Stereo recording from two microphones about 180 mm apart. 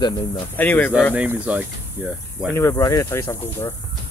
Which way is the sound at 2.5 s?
15° left (ahead or behind).